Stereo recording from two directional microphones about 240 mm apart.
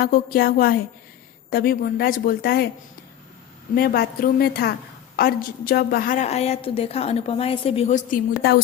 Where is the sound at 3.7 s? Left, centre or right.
Left.